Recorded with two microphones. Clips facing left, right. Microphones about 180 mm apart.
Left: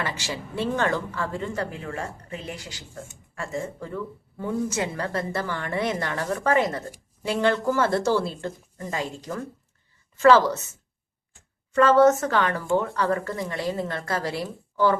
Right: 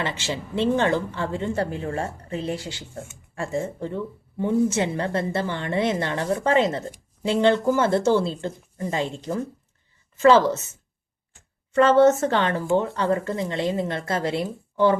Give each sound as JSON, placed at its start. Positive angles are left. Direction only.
{"t": 0.0, "sound": "speech", "side_deg": -25}
{"t": 11.7, "sound": "speech", "side_deg": -25}